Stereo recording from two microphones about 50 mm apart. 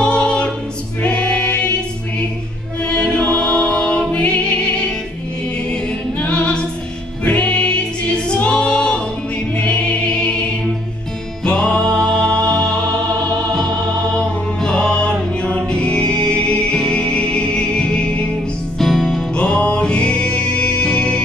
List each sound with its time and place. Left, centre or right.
0.0 s music: centre
2.8 s music: left
6.1 s a capella: left
7.2 s music: left
9.6 s choir: left
11.4 s music: centre
14.1 s music: centre
18.8 s music: centre
19.3 s music: left